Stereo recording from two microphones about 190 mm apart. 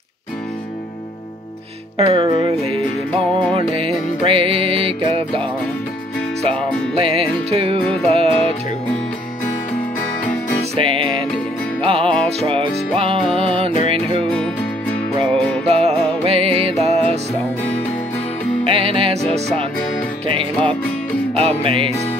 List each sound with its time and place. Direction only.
2.0 s music: 30° right (ahead or behind)
3.5 s music: 30° right (ahead or behind)
6.5 s music: 5° left (ahead or behind)
7.0 s music: 30° right (ahead or behind)
7.8 s music: 5° left (ahead or behind)
8.1 s music: 30° right (ahead or behind)
10.8 s music: 30° right (ahead or behind)
14.2 s music: 5° left (ahead or behind)
15.7 s music: 30° right (ahead or behind)
18.6 s music: 30° right (ahead or behind)
21.4 s music: 30° right (ahead or behind)